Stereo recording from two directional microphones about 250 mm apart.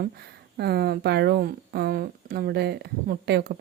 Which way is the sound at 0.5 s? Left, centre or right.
Right.